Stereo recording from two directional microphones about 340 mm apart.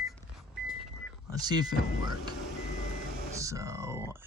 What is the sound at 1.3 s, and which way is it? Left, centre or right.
Speech, centre.